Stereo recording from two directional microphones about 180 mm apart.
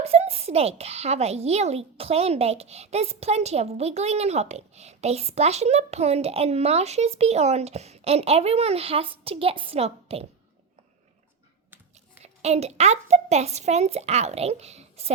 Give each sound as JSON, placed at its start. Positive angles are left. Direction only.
{"t": 0.0, "sound": "a child's voice", "side_deg": -35}
{"t": 12.2, "sound": "a child's voice", "side_deg": -35}